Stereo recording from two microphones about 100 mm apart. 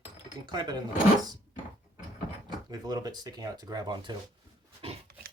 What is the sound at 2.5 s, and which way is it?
Speech, 45° right (ahead or behind).